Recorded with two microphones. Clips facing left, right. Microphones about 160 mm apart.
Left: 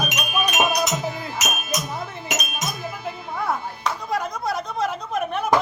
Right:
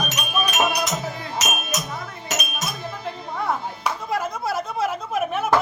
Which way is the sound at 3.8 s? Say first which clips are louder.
Even; centre (ahead or behind).